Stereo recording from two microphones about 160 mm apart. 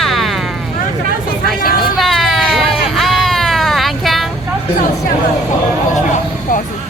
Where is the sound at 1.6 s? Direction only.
65° left (ahead or behind).